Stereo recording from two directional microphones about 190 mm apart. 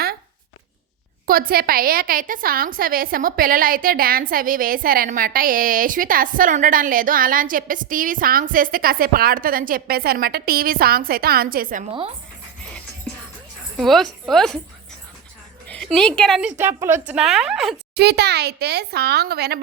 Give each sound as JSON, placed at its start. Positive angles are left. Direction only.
{"t": 1.3, "sound": "a woman's voice", "side_deg": -50}
{"t": 11.9, "sound": "speech", "side_deg": -30}
{"t": 13.7, "sound": "a woman's voice", "side_deg": 0}
{"t": 15.6, "sound": "a woman's voice", "side_deg": 5}
{"t": 17.9, "sound": "speech", "side_deg": -60}